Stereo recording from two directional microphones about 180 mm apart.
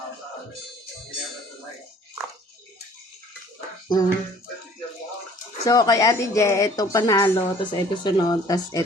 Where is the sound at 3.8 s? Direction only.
20° left (ahead or behind).